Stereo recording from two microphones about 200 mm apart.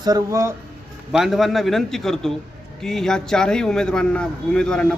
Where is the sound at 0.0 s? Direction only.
20° right (ahead or behind).